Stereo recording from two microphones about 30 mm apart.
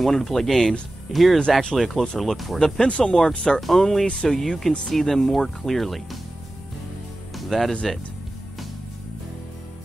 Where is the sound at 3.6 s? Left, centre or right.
Centre.